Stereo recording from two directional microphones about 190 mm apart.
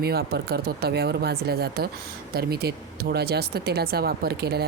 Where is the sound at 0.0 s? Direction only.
55° right (ahead or behind).